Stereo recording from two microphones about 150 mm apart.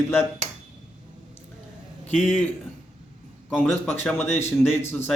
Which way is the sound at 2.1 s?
5° right (ahead or behind).